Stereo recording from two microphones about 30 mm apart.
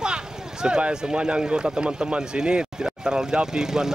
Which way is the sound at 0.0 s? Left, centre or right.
Right.